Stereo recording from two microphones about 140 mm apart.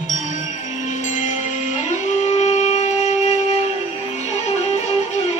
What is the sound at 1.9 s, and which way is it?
Wind instrument, 55° left (ahead or behind).